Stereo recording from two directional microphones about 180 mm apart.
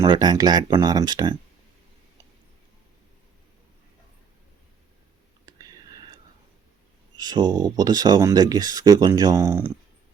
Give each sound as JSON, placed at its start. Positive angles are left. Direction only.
{"t": 0.0, "sound": "speech", "side_deg": -20}
{"t": 5.5, "sound": "whispering", "side_deg": -20}
{"t": 7.2, "sound": "speech", "side_deg": -25}